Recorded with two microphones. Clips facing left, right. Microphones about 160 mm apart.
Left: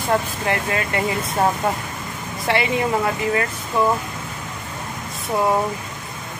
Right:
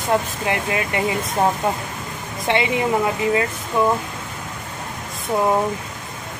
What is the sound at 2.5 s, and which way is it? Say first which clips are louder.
Speech: right 1 dB; 20° right (ahead or behind).